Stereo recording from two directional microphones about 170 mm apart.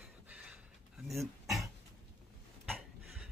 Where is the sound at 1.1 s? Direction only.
Centre (ahead or behind).